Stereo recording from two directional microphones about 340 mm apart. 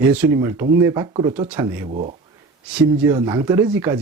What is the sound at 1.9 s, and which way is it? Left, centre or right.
Speech, centre.